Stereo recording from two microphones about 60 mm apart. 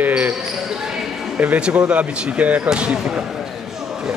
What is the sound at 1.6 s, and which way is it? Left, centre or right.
Speech, right.